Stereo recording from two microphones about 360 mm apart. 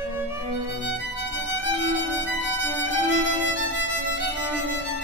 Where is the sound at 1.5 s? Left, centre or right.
Left.